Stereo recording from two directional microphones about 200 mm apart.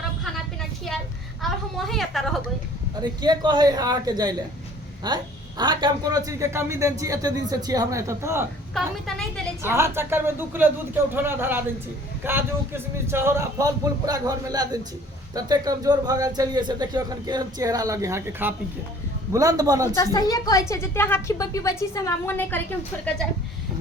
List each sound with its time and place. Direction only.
1.4 s a sound: centre (ahead or behind)
3.0 s a man's voice: 20° right (ahead or behind)
8.7 s a woman's voice: centre (ahead or behind)
9.6 s a man's voice: 10° right (ahead or behind)
20.1 s a woman's voice: 20° left (ahead or behind)